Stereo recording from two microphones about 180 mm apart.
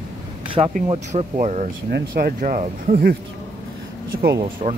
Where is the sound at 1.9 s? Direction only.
55° right (ahead or behind).